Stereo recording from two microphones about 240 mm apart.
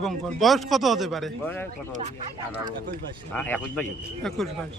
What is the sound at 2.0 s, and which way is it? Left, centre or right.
Speech, right.